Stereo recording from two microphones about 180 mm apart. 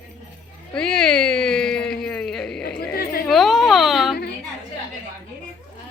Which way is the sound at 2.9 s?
60° left (ahead or behind).